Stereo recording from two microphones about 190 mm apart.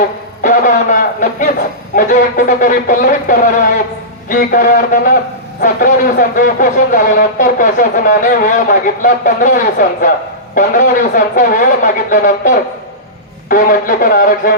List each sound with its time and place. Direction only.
0.4 s speech: 40° left (ahead or behind)